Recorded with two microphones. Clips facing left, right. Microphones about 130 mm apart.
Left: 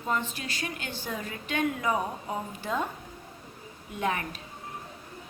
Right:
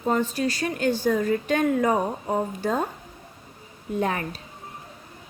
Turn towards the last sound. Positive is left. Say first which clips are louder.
# right 4 dB
turn(degrees=-35)  # may be behind; listen again after turning